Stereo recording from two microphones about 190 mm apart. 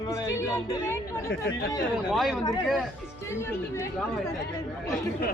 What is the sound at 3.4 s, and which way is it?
Speech, 15° left (ahead or behind).